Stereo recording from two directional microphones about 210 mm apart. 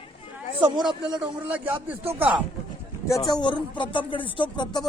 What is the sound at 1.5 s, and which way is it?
Speech, 5° right (ahead or behind).